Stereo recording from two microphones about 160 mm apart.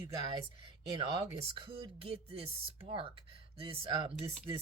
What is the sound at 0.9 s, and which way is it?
Speech, 35° right (ahead or behind).